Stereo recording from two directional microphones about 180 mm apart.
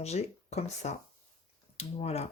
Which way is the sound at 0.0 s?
35° left (ahead or behind).